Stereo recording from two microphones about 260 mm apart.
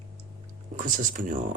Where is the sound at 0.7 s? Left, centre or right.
Right.